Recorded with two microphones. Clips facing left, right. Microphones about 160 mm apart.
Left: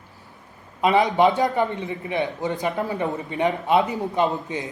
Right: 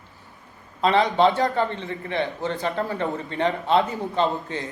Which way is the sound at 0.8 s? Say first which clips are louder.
Left 1 dB; 15° left (ahead or behind).